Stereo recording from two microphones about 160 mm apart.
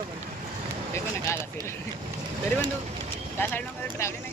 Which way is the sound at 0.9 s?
15° left (ahead or behind).